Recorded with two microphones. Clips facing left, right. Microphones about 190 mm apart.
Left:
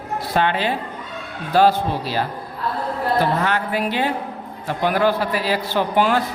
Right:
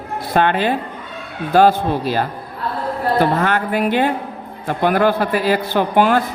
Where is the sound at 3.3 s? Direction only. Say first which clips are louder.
Right 3 dB; 50° right (ahead or behind).